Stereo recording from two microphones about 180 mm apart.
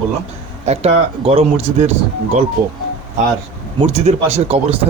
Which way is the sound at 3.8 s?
35° right (ahead or behind).